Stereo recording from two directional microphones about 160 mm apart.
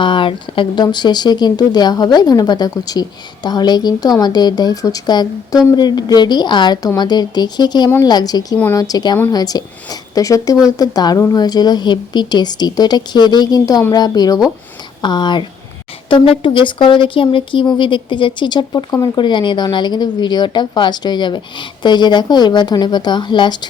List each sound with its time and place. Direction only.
0.0 s speech: 30° left (ahead or behind)